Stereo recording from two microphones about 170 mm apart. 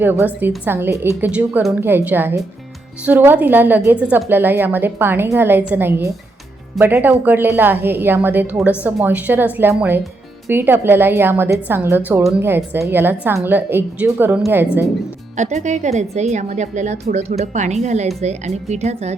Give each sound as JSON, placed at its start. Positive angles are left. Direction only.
{"t": 0.0, "sound": "a woman's voice", "side_deg": -10}
{"t": 15.4, "sound": "a woman's voice", "side_deg": -45}